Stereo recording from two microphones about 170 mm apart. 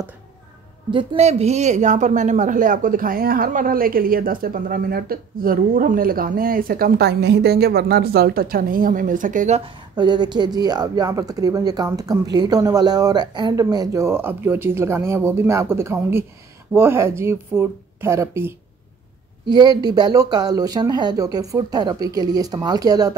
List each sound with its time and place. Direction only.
0.9 s a woman's voice: 40° right (ahead or behind)
9.9 s speech: 25° right (ahead or behind)